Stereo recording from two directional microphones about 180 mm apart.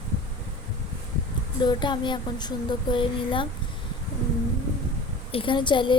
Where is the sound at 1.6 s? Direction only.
25° left (ahead or behind).